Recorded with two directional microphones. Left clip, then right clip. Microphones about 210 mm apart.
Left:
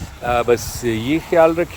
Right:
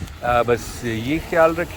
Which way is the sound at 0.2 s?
25° left (ahead or behind).